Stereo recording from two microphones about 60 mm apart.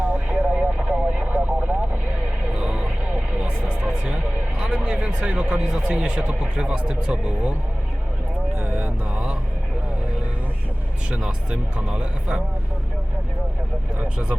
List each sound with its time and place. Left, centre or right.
0.3 s vehicle: right
4.6 s a man's voice: right
8.5 s vehicle: right
11.1 s speech: centre
14.0 s speech: right